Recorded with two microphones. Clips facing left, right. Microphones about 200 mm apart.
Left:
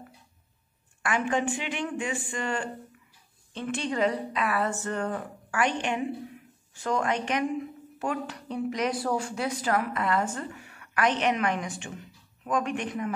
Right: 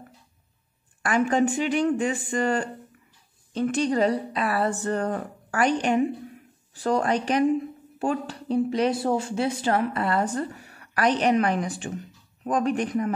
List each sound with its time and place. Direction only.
1.0 s speech: 40° right (ahead or behind)